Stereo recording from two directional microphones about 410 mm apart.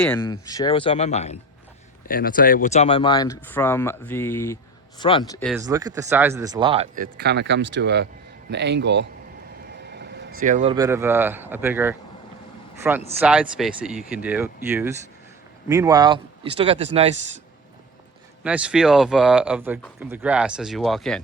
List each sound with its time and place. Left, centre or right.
0.0 s a man's voice: centre
18.4 s speech: centre